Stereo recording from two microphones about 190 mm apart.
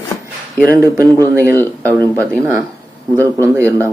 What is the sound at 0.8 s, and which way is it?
Speech, 15° right (ahead or behind).